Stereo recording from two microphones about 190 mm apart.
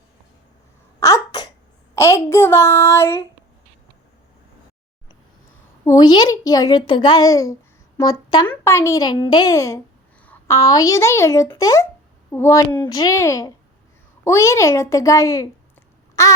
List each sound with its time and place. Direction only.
0.9 s sneeze: 15° left (ahead or behind)
2.0 s a child's voice: 15° left (ahead or behind)
5.8 s a child's voice: 20° left (ahead or behind)